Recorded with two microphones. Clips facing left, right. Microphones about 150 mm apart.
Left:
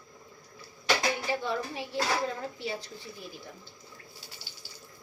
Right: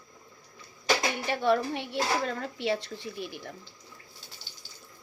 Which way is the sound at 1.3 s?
70° right (ahead or behind).